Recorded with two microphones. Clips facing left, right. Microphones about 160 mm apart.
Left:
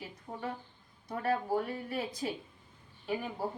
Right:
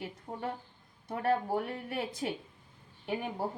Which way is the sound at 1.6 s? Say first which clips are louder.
Even; 60° right (ahead or behind).